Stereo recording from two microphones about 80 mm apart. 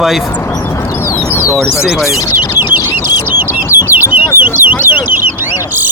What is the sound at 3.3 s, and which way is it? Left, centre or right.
Bird, right.